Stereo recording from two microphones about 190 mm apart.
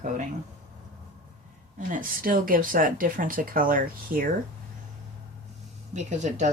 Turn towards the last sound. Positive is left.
turn(degrees=-35)  # may be behind; listen again after turning